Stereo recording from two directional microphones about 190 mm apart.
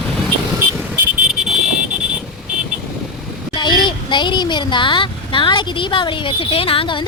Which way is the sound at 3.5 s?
25° left (ahead or behind).